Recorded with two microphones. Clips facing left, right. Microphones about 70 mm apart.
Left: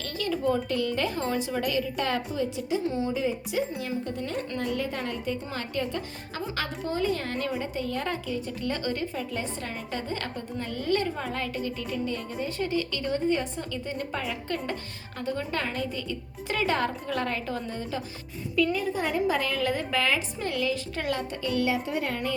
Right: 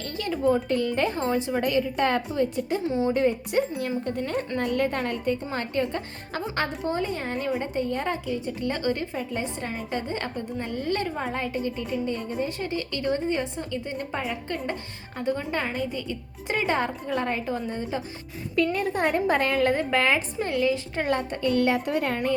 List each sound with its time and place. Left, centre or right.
0.0 s a child's voice: right
5.5 s a woman's voice: right
7.6 s a woman's voice: right; by 17.6 s centre
17.7 s a woman's voice: right
18.5 s a woman's voice: right